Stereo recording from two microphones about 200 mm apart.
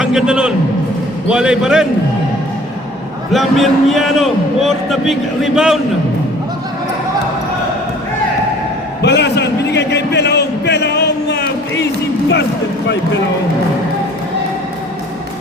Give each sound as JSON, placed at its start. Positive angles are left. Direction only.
{"t": 0.0, "sound": "a man's voice", "side_deg": -5}
{"t": 3.3, "sound": "a man's voice", "side_deg": 0}
{"t": 9.0, "sound": "a man's voice", "side_deg": 60}